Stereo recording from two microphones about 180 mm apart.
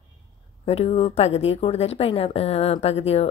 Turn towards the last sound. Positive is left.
turn(degrees=35)  # may be behind; listen again after turning